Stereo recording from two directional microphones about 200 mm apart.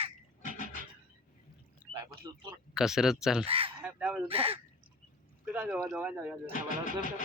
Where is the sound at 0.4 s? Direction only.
45° left (ahead or behind).